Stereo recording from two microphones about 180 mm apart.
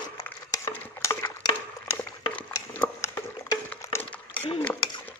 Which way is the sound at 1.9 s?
10° left (ahead or behind).